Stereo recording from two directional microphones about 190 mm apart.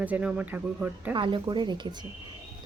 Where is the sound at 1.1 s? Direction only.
25° right (ahead or behind).